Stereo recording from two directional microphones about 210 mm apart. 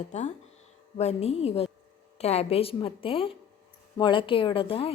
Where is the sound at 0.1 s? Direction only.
35° left (ahead or behind).